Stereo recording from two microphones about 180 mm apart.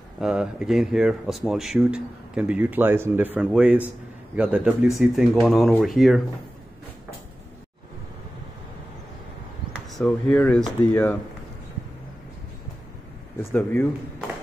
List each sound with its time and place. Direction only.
0.2 s speech: 5° right (ahead or behind)
9.8 s speech: 5° left (ahead or behind)
13.4 s speech: 15° left (ahead or behind)